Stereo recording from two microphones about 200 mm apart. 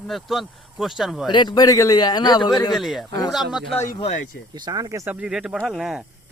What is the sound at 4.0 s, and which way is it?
Speech, 35° left (ahead or behind).